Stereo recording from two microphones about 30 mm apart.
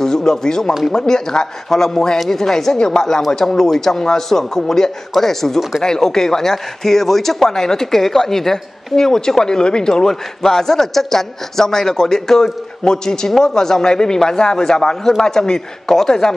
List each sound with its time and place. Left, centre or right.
0.0 s a man's voice: centre